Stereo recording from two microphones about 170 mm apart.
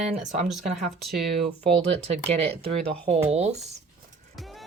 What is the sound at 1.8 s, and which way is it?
Speech, 35° right (ahead or behind).